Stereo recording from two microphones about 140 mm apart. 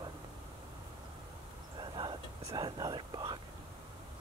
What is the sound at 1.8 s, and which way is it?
Speech, 35° right (ahead or behind).